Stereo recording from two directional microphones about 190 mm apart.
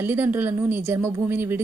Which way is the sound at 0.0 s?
10° right (ahead or behind).